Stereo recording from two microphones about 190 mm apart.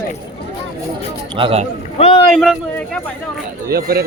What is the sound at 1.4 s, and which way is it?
Speech, 30° right (ahead or behind).